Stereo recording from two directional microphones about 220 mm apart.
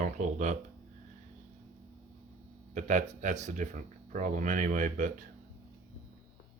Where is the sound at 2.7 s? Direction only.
35° right (ahead or behind).